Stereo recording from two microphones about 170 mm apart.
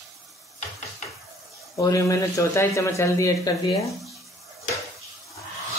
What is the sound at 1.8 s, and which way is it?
Speech, 20° left (ahead or behind).